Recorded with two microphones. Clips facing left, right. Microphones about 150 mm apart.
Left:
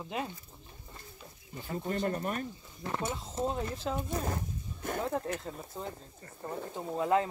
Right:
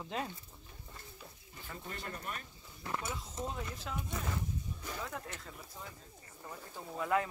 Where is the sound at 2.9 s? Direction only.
25° left (ahead or behind); by 5.0 s 50° left (ahead or behind).